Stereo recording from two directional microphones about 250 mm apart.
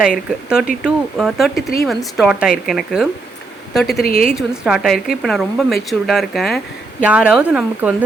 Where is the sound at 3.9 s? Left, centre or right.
Left.